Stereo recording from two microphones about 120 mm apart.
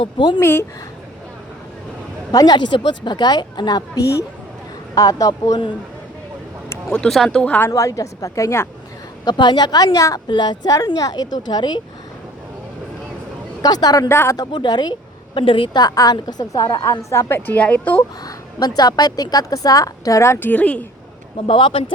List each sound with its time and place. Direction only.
0.3 s a woman's voice: 20° left (ahead or behind)
2.3 s a woman's voice: 35° left (ahead or behind)
6.9 s speech: 5° left (ahead or behind)
7.7 s a woman's voice: 25° left (ahead or behind)
9.2 s a woman's voice: 40° left (ahead or behind)
10.3 s a woman's voice: 40° left (ahead or behind)
13.6 s a woman's voice: 35° left (ahead or behind)
14.1 s a woman's voice: 20° left (ahead or behind)
14.3 s a woman's voice: 35° left (ahead or behind); by 18.0 s 15° left (ahead or behind)
18.3 s a woman's voice: 35° left (ahead or behind); by 20.8 s 10° left (ahead or behind)
21.3 s speech: 45° left (ahead or behind)